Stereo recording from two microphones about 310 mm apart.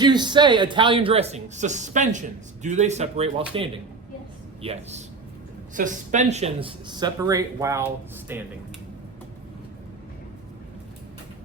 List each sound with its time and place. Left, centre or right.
0.0 s speech: centre